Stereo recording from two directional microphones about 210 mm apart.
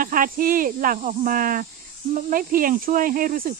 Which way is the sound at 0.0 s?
40° right (ahead or behind).